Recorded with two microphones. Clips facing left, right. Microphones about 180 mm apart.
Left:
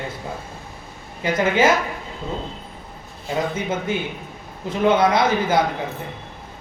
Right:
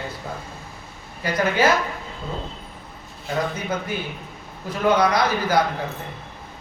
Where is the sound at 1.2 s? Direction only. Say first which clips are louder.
Left 2 dB; 20° left (ahead or behind).